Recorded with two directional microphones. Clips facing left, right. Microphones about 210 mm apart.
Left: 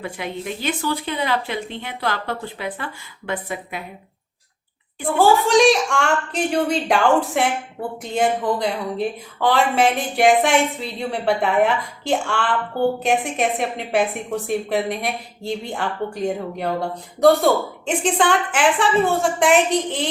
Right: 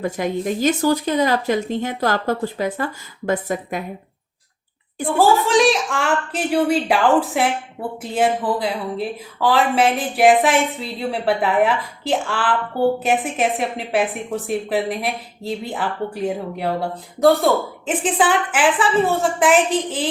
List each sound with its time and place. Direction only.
0.0 s speech: 40° right (ahead or behind)
5.0 s a woman's voice: centre (ahead or behind)